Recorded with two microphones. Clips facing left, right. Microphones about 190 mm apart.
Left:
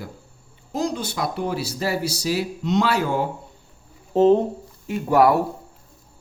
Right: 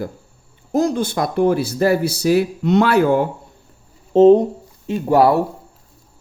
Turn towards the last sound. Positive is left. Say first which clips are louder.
# right 3 dB
turn(degrees=-30)  # may be behind; listen again after turning